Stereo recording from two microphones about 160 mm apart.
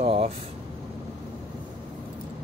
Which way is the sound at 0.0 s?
35° right (ahead or behind).